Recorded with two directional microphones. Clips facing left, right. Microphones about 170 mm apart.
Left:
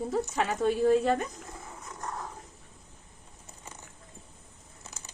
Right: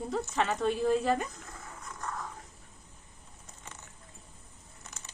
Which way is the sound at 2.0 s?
30° left (ahead or behind).